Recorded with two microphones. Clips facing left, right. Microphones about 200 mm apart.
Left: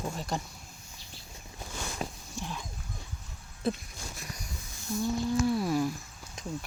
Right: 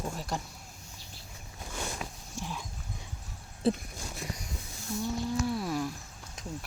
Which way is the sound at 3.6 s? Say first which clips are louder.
Right 3 dB; 30° right (ahead or behind).